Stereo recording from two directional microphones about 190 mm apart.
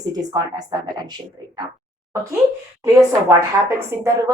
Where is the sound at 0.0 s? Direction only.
20° right (ahead or behind).